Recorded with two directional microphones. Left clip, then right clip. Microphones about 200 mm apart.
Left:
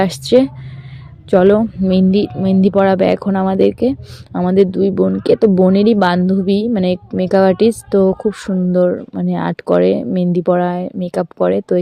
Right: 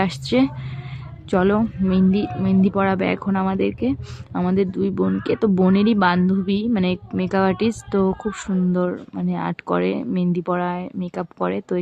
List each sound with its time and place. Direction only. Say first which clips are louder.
0.0 s speech: left 8 dB; 30° left (ahead or behind)